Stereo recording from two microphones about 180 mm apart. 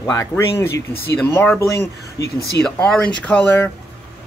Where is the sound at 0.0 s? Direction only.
15° left (ahead or behind).